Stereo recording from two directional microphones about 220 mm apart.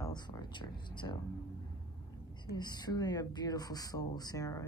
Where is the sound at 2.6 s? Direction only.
20° left (ahead or behind).